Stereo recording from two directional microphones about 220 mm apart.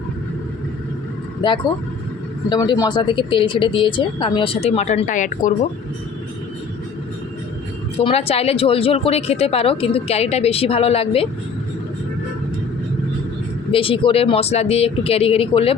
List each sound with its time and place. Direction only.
1.4 s speech: 20° left (ahead or behind)
8.0 s speech: 25° left (ahead or behind)
13.7 s speech: 25° left (ahead or behind)